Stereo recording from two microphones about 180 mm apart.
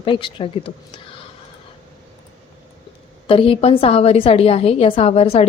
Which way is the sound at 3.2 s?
30° left (ahead or behind).